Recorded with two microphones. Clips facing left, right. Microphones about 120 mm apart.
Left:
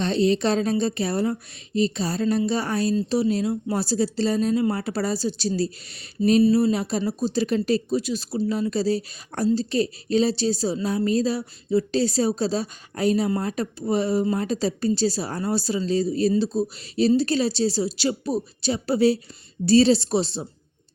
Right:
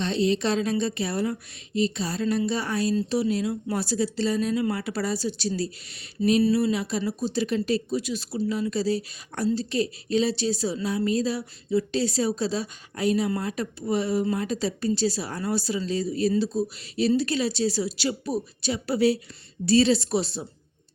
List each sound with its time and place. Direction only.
0.0 s a woman's voice: 40° left (ahead or behind)